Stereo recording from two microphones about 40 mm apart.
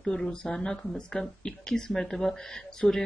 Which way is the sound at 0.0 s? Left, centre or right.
Centre.